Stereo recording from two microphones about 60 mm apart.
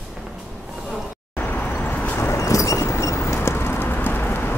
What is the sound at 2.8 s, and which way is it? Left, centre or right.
Clip-clop, left.